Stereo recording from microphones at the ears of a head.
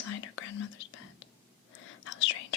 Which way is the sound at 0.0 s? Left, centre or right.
Left.